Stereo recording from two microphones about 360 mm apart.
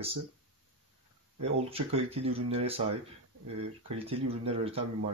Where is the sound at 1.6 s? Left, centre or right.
Centre.